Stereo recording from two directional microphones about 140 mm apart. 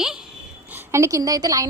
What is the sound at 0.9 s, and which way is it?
Speech, 20° right (ahead or behind).